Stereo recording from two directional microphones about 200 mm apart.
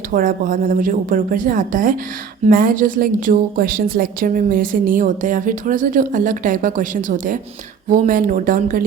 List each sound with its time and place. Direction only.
0.1 s a woman's voice: 40° right (ahead or behind)